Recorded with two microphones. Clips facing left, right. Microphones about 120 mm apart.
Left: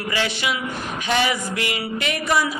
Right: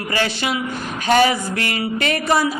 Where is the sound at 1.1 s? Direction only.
45° right (ahead or behind).